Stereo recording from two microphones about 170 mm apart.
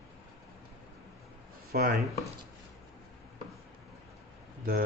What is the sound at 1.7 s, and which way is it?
Speech, 60° right (ahead or behind).